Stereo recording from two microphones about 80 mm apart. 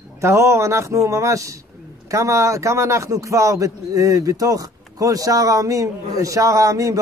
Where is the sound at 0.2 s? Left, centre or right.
Right.